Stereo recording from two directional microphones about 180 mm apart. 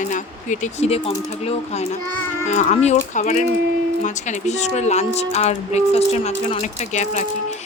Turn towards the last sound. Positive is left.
turn(degrees=40)  # may be behind; listen again after turning